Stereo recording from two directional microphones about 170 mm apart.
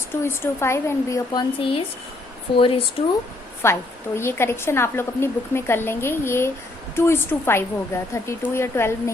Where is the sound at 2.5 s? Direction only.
30° left (ahead or behind).